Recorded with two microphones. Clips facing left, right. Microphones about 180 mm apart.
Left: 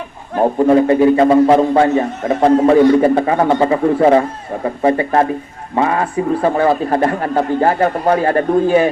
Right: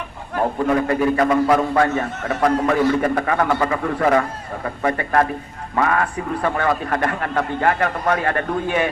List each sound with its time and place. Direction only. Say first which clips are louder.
0.3 s a man's voice: left 8 dB; 30° left (ahead or behind)